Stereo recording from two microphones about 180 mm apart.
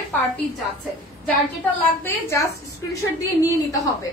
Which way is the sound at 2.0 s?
15° left (ahead or behind).